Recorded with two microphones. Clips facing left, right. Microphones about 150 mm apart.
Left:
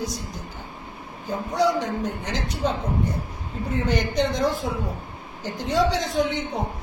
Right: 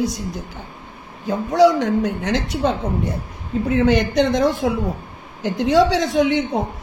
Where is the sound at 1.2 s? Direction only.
90° right.